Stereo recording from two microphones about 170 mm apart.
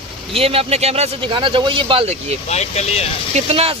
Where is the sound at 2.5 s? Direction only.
40° left (ahead or behind).